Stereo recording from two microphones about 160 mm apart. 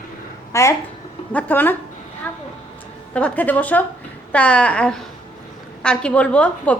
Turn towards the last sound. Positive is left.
turn(degrees=10)  # may be behind; listen again after turning